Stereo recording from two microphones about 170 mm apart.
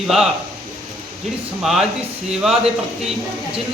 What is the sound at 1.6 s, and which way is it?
Speech, centre (ahead or behind).